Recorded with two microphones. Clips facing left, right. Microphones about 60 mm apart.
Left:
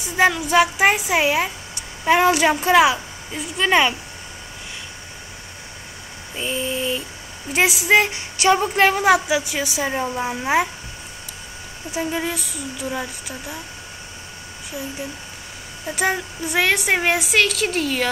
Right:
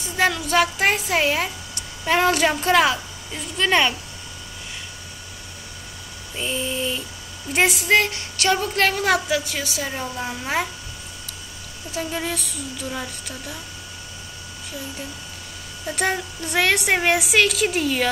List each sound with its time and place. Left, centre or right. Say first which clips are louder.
0.0 s speech: left 3 dB; centre
6.3 s a woman's voice: left 1 dB; centre
11.9 s speech: left 3 dB; centre
15.9 s a woman's voice: left 2 dB; centre